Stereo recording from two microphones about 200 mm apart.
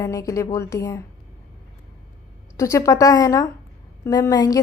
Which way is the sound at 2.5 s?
15° left (ahead or behind).